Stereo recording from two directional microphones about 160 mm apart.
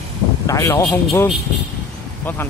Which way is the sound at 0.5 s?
20° left (ahead or behind).